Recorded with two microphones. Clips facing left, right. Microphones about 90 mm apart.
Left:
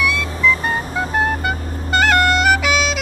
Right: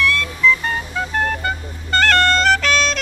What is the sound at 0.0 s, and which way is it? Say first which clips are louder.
Vehicle: right 1 dB; 15° left (ahead or behind).